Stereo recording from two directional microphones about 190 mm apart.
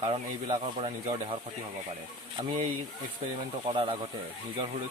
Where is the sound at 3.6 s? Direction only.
30° right (ahead or behind).